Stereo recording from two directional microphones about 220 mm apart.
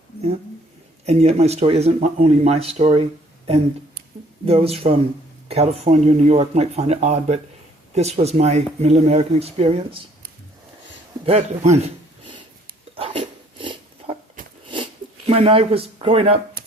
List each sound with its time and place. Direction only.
1.0 s speech: 30° right (ahead or behind)
4.4 s speech: 25° right (ahead or behind)
11.3 s speech: 30° right (ahead or behind)
13.0 s dog: 25° right (ahead or behind)
15.3 s speech: 25° right (ahead or behind)